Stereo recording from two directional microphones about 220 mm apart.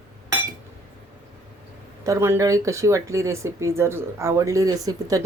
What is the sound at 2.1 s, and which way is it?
Speech, 10° right (ahead or behind).